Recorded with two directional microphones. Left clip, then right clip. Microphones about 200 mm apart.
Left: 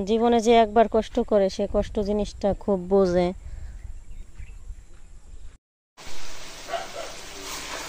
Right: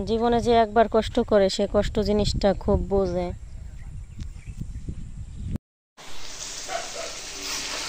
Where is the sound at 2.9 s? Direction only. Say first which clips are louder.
Left 4 dB; 25° left (ahead or behind).